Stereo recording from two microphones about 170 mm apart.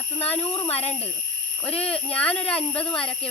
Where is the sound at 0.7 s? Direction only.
35° left (ahead or behind).